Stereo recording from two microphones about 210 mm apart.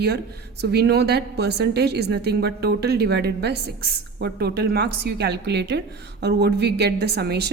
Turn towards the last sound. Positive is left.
turn(degrees=-50)  # may be behind; listen again after turning